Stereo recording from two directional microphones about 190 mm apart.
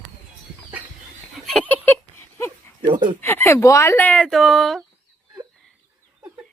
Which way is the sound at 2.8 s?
45° right (ahead or behind).